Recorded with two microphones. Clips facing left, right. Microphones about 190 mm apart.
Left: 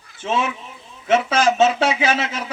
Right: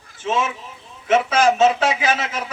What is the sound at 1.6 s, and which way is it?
Speech, 30° left (ahead or behind).